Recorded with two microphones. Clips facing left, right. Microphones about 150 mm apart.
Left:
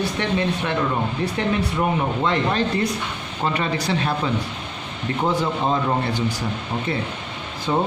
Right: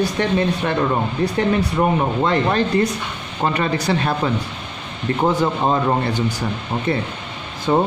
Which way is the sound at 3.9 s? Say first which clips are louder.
Right 4 dB; 55° right (ahead or behind).